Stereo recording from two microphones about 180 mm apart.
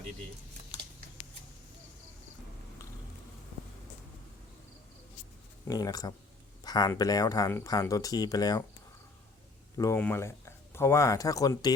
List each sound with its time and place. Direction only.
5.6 s speech: 20° left (ahead or behind)
9.7 s speech: 20° left (ahead or behind)